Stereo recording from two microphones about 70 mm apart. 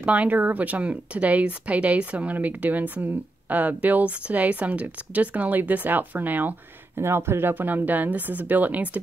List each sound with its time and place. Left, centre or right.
0.0 s speech: right
7.0 s speech: right